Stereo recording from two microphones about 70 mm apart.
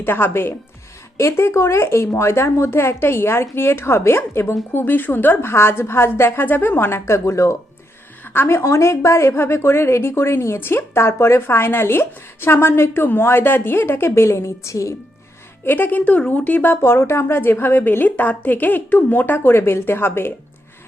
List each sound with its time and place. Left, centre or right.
0.0 s a woman's voice: left
8.2 s a woman's voice: left
8.6 s a woman's voice: left
15.6 s a woman's voice: left
16.8 s a woman's voice: left